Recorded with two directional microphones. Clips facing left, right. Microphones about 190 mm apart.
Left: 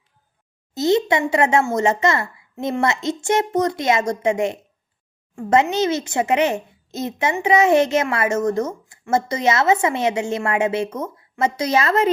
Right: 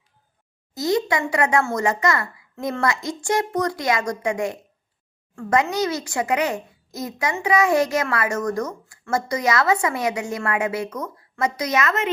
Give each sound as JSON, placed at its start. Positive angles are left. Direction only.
{"t": 0.7, "sound": "speech", "side_deg": 25}